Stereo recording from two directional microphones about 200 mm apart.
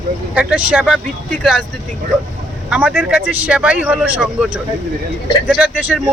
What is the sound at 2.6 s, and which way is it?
Speech, 5° right (ahead or behind).